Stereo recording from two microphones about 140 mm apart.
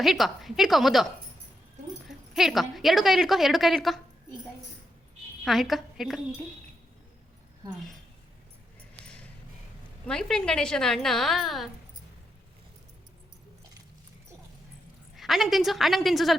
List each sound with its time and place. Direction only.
0.0 s speech: centre (ahead or behind)
2.0 s speech: centre (ahead or behind)
5.5 s speech: centre (ahead or behind)
10.1 s speech: 5° left (ahead or behind)
15.1 s speech: centre (ahead or behind)